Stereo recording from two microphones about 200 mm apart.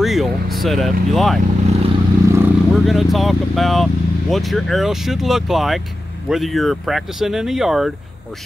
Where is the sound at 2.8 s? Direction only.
Centre (ahead or behind).